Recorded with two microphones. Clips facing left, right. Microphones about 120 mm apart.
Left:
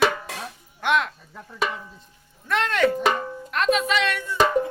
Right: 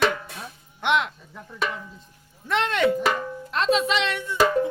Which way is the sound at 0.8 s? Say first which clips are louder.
Even; 20° right (ahead or behind).